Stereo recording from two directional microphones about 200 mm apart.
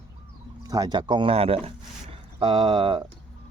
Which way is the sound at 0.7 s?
20° right (ahead or behind).